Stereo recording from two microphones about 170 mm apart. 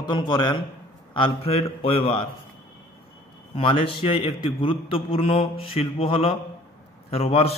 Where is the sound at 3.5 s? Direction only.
30° left (ahead or behind).